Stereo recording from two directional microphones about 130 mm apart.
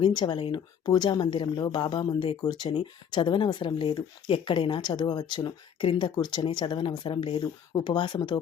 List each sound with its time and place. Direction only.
0.0 s speech: 35° left (ahead or behind)